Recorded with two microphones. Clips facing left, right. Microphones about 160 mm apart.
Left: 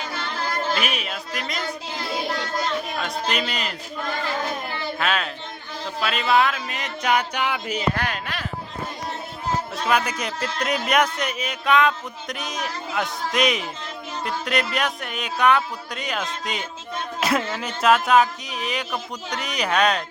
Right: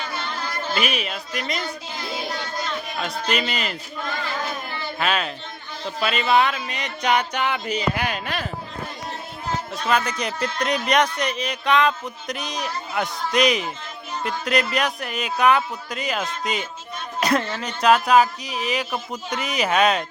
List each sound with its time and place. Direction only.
0.7 s speech: centre (ahead or behind)
3.0 s a man's voice: centre (ahead or behind)
4.9 s a man's voice: centre (ahead or behind)
7.9 s speech: 15° right (ahead or behind)
9.9 s a man's voice: 5° left (ahead or behind)